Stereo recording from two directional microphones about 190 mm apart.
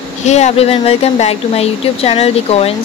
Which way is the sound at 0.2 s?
35° left (ahead or behind).